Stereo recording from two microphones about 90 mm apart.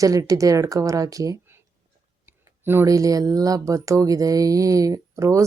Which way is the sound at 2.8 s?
40° right (ahead or behind).